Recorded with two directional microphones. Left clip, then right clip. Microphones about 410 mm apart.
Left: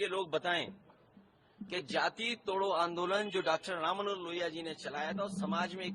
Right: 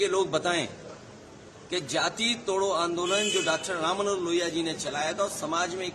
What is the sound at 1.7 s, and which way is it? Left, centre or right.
A man's voice, left.